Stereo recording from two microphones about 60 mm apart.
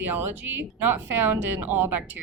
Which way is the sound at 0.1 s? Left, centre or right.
Right.